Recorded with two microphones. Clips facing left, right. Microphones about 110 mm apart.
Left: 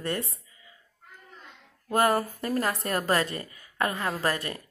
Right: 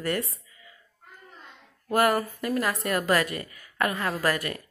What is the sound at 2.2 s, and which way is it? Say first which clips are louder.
A woman's voice: right 1 dB; 40° left (ahead or behind).